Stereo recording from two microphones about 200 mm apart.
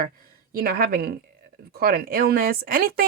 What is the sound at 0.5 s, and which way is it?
A woman's voice, 45° right (ahead or behind).